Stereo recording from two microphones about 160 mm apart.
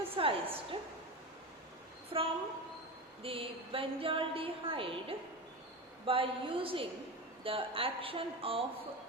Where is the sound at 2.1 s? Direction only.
35° right (ahead or behind).